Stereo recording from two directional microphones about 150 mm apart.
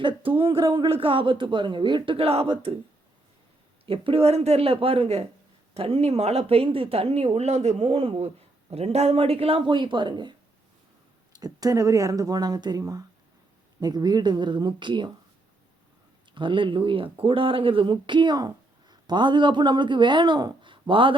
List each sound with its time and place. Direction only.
0.0 s speech: 35° right (ahead or behind)
3.8 s speech: 40° right (ahead or behind)
11.3 s speech: 25° right (ahead or behind)
16.3 s speech: 35° right (ahead or behind)